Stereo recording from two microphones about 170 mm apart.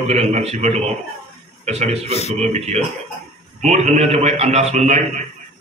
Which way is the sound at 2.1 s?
40° left (ahead or behind).